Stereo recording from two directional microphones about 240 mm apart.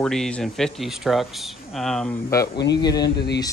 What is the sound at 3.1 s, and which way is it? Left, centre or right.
Speech, left.